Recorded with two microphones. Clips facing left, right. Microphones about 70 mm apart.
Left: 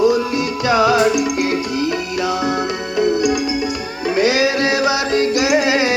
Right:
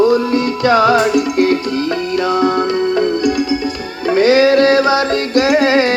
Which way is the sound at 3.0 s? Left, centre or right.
Centre.